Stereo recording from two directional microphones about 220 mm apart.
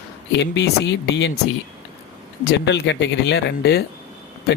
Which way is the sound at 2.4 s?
50° left (ahead or behind).